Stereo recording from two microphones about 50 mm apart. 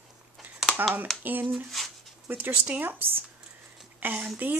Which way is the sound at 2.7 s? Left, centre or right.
Right.